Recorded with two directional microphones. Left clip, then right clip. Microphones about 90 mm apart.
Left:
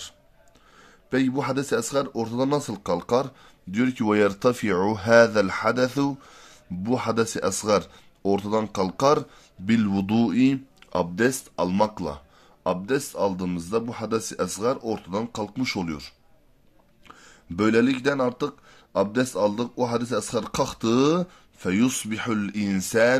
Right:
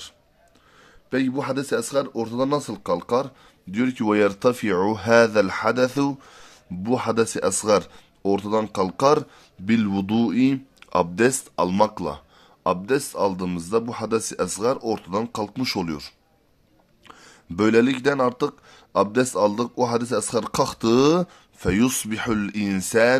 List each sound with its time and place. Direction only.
1.1 s speech: centre (ahead or behind)
3.7 s speech: 5° right (ahead or behind)
9.8 s speech: centre (ahead or behind)
10.8 s speech: 40° right (ahead or behind)